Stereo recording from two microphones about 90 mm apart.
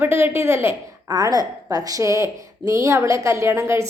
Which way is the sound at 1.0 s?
40° right (ahead or behind).